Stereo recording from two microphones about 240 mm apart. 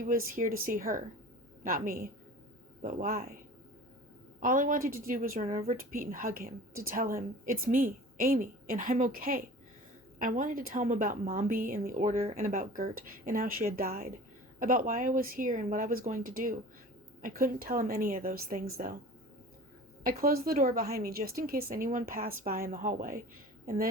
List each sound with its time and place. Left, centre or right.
0.0 s a woman's voice: right
4.4 s a woman's voice: right
20.1 s a woman's voice: right